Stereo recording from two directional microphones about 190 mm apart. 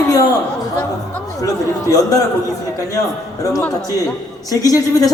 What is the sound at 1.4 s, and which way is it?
Speech, 15° left (ahead or behind).